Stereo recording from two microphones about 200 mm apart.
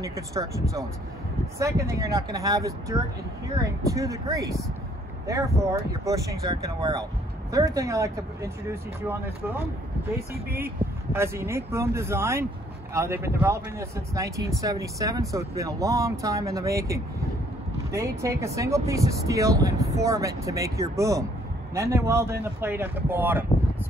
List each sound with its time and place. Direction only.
0.0 s speech: 15° right (ahead or behind)
1.6 s speech: 15° right (ahead or behind)
11.1 s speech: 10° right (ahead or behind)